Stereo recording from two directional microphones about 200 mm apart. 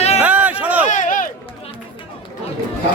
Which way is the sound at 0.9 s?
40° left (ahead or behind).